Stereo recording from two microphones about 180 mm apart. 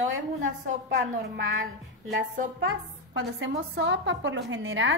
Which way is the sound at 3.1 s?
90° right.